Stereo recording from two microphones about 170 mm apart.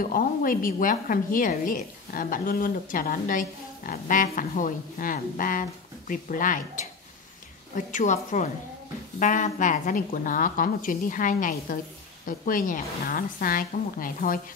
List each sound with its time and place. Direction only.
0.0 s a woman's voice: 55° left (ahead or behind)